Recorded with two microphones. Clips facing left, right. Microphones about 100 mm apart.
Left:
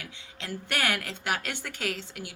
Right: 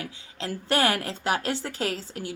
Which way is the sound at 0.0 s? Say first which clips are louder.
Right 7 dB; 35° right (ahead or behind).